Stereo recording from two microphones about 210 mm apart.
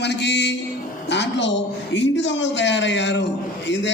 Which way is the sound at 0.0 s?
55° left (ahead or behind).